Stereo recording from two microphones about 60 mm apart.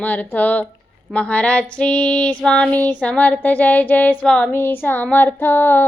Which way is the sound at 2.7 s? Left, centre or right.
Left.